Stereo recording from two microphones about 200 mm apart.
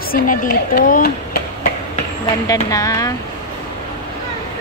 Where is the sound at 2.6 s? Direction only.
15° left (ahead or behind).